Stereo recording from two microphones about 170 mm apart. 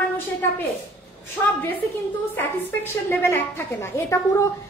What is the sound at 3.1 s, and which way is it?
A woman's voice, 15° left (ahead or behind).